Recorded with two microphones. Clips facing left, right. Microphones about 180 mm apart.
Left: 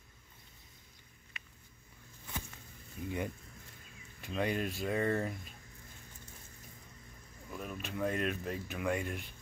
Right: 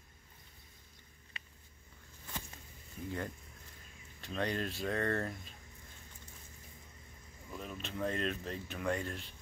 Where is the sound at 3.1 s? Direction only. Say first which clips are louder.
Left 3 dB; 15° left (ahead or behind).